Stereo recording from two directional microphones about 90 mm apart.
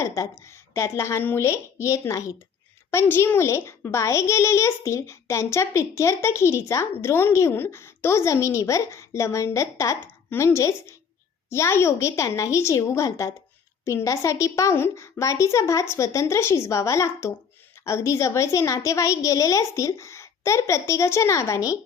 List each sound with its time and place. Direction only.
0.0 s a child's voice: 30° left (ahead or behind)